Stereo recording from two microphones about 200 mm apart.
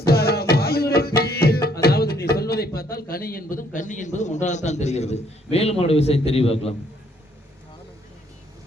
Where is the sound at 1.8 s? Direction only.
50° left (ahead or behind); by 6.2 s 30° left (ahead or behind).